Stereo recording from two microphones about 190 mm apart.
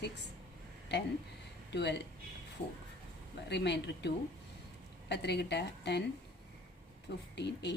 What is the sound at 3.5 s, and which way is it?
A woman's voice, 65° left (ahead or behind).